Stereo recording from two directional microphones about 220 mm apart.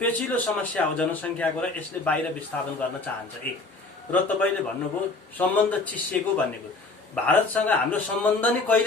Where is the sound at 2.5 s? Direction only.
5° left (ahead or behind).